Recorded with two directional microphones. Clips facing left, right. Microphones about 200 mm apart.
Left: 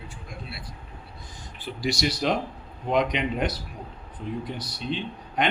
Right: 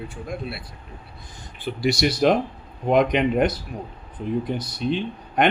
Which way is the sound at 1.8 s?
60° right (ahead or behind).